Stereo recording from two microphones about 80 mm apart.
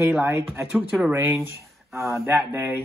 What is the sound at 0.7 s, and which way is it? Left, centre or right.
Speech, centre.